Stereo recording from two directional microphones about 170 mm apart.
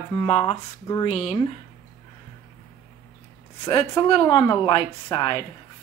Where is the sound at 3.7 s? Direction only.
30° left (ahead or behind).